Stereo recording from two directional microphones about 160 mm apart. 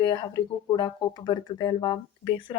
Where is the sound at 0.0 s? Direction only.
25° left (ahead or behind).